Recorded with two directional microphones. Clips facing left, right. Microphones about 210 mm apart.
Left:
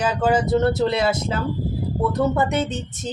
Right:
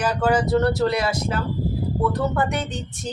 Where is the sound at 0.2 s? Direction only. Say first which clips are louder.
Left 1 dB; 20° left (ahead or behind).